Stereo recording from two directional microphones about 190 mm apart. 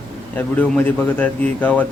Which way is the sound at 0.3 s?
10° left (ahead or behind).